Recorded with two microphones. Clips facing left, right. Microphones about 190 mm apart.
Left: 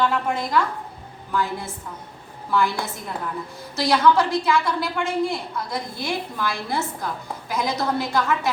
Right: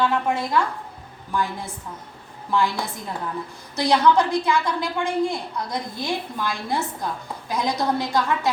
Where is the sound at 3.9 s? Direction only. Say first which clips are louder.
Even; 15° right (ahead or behind).